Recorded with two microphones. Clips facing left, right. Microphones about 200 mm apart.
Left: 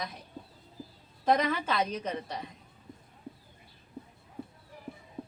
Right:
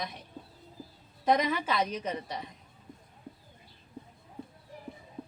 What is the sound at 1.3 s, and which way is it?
A woman's voice, 10° right (ahead or behind).